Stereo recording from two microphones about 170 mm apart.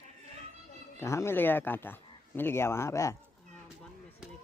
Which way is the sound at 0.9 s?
15° left (ahead or behind).